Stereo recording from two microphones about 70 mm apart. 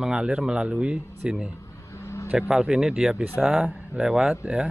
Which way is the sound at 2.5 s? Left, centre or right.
Centre.